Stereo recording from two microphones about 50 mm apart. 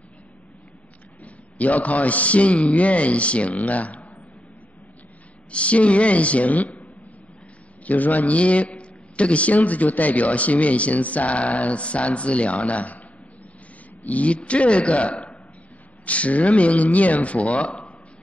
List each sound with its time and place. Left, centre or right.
1.2 s a man's voice: left
5.5 s a man's voice: left
14.0 s a man's voice: left